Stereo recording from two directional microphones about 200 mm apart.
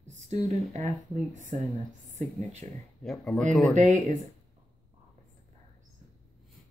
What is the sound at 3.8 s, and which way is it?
Speech, 40° right (ahead or behind).